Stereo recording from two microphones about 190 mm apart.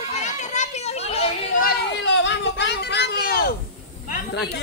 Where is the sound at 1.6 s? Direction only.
65° left (ahead or behind).